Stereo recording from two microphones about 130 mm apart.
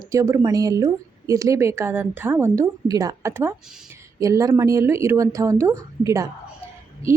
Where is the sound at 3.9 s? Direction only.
25° right (ahead or behind).